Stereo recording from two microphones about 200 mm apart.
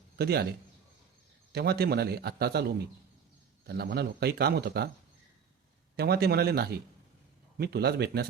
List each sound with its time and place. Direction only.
0.2 s a man's voice: 55° right (ahead or behind)
1.5 s a man's voice: 55° right (ahead or behind)
6.0 s a man's voice: 55° right (ahead or behind)